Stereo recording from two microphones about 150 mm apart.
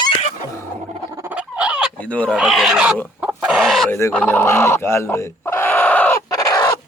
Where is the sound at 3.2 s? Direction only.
10° right (ahead or behind).